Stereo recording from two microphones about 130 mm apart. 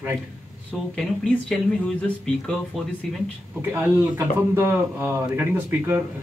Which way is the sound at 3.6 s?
15° right (ahead or behind).